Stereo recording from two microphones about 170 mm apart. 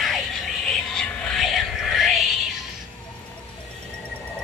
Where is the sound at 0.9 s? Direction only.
5° left (ahead or behind).